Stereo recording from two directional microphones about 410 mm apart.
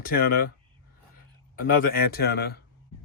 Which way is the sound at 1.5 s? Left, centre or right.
Left.